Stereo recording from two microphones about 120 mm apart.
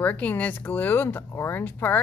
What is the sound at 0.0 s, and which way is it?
Speech, 15° left (ahead or behind).